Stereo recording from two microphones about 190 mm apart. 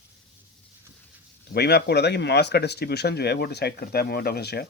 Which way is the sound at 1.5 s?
60° left (ahead or behind).